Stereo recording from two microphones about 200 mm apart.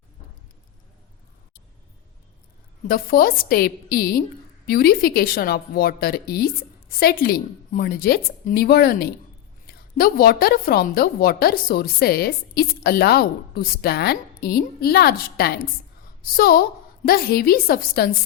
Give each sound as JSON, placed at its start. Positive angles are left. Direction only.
{"t": 2.8, "sound": "a woman's voice", "side_deg": 45}